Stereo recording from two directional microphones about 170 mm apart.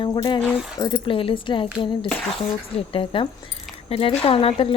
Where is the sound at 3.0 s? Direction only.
30° left (ahead or behind).